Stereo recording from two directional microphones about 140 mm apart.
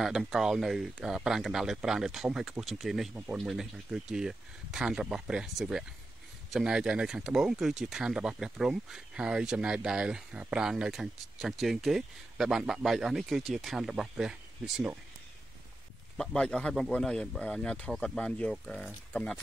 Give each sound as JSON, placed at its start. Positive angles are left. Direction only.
{"t": 0.0, "sound": "speech", "side_deg": 0}
{"t": 16.2, "sound": "speech", "side_deg": 5}